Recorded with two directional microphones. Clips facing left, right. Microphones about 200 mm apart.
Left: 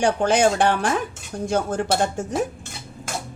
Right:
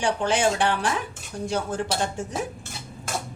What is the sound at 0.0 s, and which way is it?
Speech, 45° left (ahead or behind).